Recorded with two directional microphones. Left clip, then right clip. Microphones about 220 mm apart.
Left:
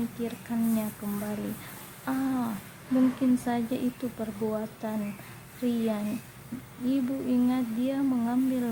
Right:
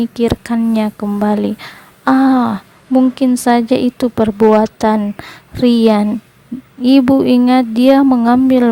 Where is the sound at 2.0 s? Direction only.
45° right (ahead or behind).